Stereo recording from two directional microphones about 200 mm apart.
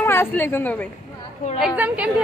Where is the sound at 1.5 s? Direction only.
5° right (ahead or behind).